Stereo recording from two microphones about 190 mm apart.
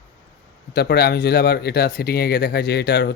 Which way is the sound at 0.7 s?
55° left (ahead or behind).